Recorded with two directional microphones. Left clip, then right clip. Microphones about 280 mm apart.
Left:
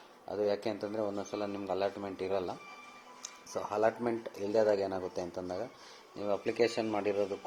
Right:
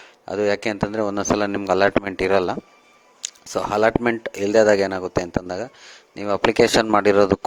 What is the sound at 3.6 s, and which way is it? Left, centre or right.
Speech, right.